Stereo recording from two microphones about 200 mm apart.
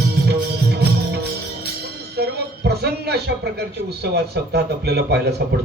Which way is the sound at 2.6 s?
55° right (ahead or behind).